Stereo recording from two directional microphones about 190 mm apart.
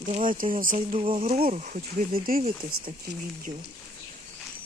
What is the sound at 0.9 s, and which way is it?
Speech, 30° right (ahead or behind).